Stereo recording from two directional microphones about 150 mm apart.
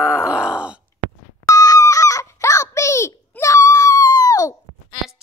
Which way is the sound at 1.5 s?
25° left (ahead or behind).